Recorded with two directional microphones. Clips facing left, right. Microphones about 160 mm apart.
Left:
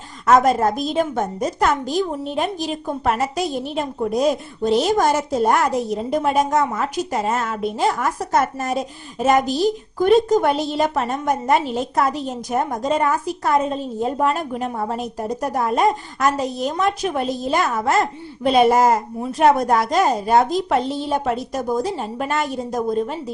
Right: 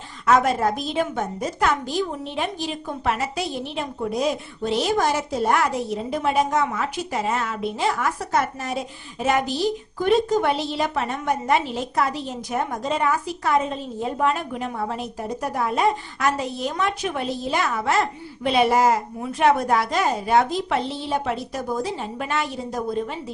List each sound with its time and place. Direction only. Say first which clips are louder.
0.3 s a woman's voice: left 4 dB; 40° left (ahead or behind)